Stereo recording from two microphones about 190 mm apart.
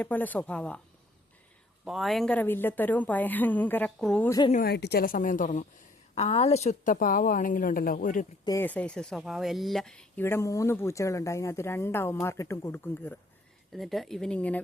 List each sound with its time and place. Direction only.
0.0 s speech: 10° left (ahead or behind)
1.8 s speech: centre (ahead or behind)
4.3 s speech: 20° left (ahead or behind)
4.5 s a woman's voice: 55° left (ahead or behind)
8.4 s speech: 10° left (ahead or behind)